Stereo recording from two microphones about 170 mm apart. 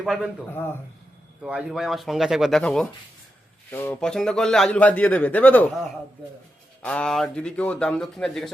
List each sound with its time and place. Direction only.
0.0 s a man's voice: centre (ahead or behind)
0.5 s a man's voice: 10° left (ahead or behind)
1.4 s speech: 5° right (ahead or behind)
3.7 s speech: 15° left (ahead or behind)
4.0 s a man's voice: 5° left (ahead or behind)
6.8 s speech: 5° left (ahead or behind)